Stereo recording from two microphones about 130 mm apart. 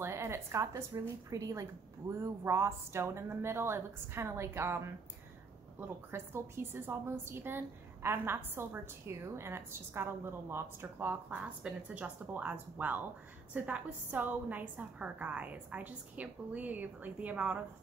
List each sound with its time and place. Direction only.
0.0 s a woman's voice: 20° right (ahead or behind)